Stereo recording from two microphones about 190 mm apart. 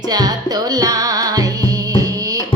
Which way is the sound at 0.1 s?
20° right (ahead or behind).